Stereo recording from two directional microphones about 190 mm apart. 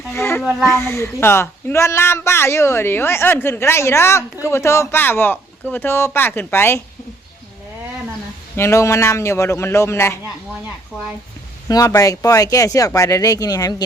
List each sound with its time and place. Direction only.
0.1 s a sound: 15° left (ahead or behind)
0.6 s speech: 15° left (ahead or behind)
8.5 s speech: 15° left (ahead or behind)
11.7 s speech: 15° left (ahead or behind)